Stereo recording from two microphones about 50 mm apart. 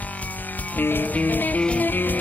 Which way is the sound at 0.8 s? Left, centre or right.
Left.